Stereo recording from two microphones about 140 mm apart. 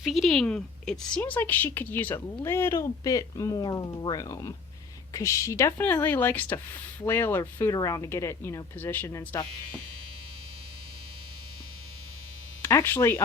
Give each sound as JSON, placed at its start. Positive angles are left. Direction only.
{"t": 0.0, "sound": "a woman's voice", "side_deg": 0}
{"t": 12.6, "sound": "speech", "side_deg": 15}